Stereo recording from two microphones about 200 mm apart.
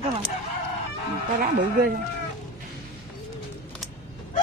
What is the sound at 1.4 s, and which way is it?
Speech, 50° right (ahead or behind).